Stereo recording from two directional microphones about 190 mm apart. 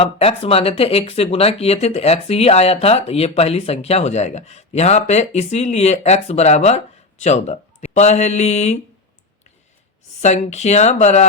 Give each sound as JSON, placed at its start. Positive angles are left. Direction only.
{"t": 0.0, "sound": "speech", "side_deg": 30}
{"t": 10.2, "sound": "speech", "side_deg": 35}